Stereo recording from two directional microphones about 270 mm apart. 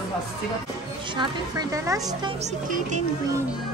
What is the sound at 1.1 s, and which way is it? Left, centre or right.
A woman's voice, centre.